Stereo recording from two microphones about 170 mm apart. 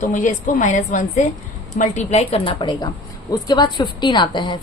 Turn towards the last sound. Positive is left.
turn(degrees=25)  # may be behind; listen again after turning